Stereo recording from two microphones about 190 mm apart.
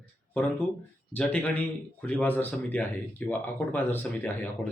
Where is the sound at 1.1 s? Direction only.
5° left (ahead or behind).